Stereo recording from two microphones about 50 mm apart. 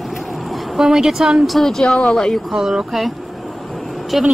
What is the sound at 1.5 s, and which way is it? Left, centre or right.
Speech, centre.